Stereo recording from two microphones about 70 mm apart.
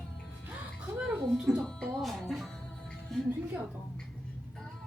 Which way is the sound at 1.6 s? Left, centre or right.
Centre.